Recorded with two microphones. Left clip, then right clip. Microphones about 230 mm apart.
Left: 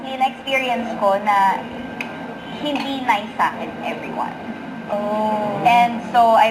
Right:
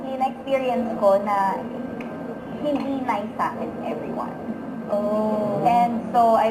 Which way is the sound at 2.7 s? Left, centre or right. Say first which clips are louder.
Left 8 dB; left.